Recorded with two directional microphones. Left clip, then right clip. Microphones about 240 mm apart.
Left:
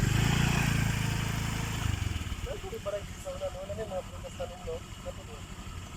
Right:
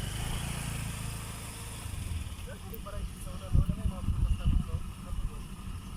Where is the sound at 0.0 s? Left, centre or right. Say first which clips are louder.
Left 9 dB; left.